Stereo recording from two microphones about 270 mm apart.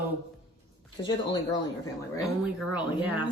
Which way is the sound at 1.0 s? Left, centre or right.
Centre.